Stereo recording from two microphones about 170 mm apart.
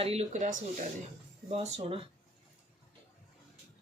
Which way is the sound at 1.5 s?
35° right (ahead or behind).